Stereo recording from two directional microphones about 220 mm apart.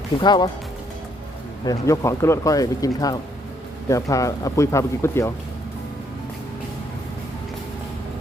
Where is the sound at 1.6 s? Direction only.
15° left (ahead or behind).